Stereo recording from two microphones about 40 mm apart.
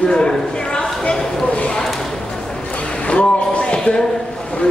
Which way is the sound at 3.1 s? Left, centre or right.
Left.